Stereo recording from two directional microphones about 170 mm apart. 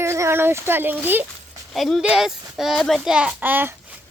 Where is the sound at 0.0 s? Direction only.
15° right (ahead or behind).